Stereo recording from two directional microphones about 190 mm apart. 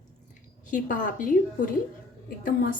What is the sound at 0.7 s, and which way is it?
Speech, 45° left (ahead or behind).